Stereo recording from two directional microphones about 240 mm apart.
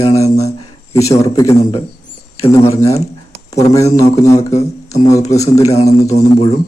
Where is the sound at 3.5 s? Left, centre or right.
Centre.